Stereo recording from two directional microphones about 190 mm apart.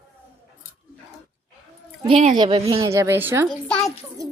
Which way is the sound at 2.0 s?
30° right (ahead or behind).